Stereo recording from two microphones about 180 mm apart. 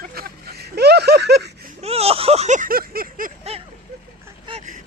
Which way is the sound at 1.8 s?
35° right (ahead or behind).